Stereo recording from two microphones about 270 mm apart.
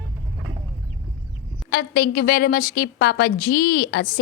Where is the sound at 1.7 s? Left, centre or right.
Left.